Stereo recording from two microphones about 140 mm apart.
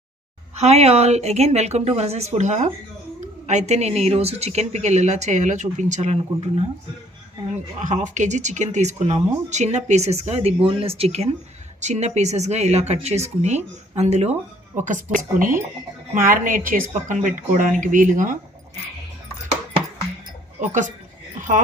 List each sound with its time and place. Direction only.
0.5 s speech: 50° right (ahead or behind)
7.5 s speech: 55° right (ahead or behind)
14.8 s a woman's voice: 65° right (ahead or behind)
20.6 s speech: 60° right (ahead or behind)